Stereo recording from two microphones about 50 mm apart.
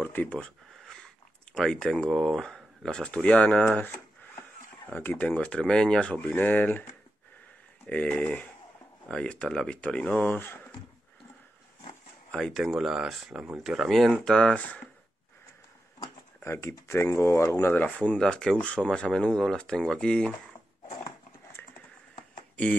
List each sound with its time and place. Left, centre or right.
0.0 s a sound: left
1.5 s speech: centre
4.8 s speech: left
5.2 s speech: left
6.4 s speech: left
7.8 s speech: left
12.3 s speech: centre
12.5 s speech: centre
13.7 s speech: centre
16.4 s speech: left
17.5 s speech: left
17.8 s speech: left
18.1 s speech: centre
18.6 s speech: left